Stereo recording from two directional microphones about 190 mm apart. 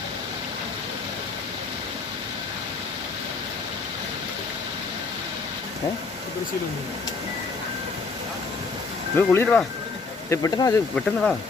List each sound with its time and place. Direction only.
9.1 s speech: 10° left (ahead or behind)
10.9 s speech: 5° left (ahead or behind)